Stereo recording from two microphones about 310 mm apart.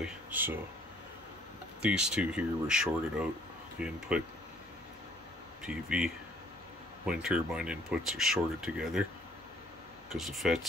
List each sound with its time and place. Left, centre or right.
0.0 s speech: centre
1.8 s speech: centre
5.6 s speech: centre
10.0 s speech: centre